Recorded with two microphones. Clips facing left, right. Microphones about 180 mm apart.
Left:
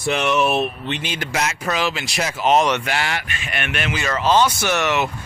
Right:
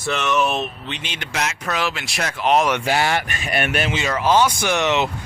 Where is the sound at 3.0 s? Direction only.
45° right (ahead or behind).